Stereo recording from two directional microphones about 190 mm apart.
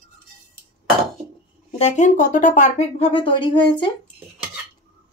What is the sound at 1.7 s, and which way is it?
A woman's voice, 35° left (ahead or behind).